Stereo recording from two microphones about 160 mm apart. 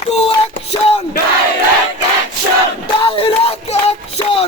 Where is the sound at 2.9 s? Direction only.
35° left (ahead or behind).